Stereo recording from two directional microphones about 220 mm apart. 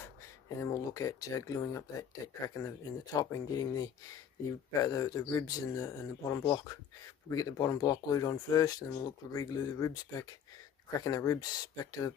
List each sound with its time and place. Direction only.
0.6 s speech: 15° left (ahead or behind)